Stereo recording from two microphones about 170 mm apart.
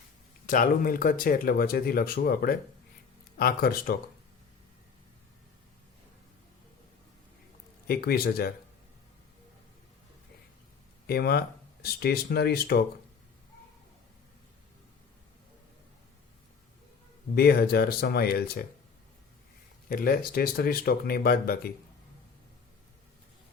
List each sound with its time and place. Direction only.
0.4 s speech: 55° left (ahead or behind)
7.9 s speech: 65° left (ahead or behind)
11.0 s speech: 65° left (ahead or behind)
17.3 s speech: 65° left (ahead or behind)
19.9 s speech: 60° left (ahead or behind)